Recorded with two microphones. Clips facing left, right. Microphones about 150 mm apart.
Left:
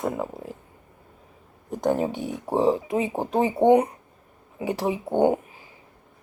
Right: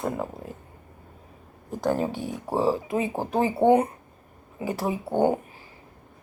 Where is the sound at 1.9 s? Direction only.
20° left (ahead or behind).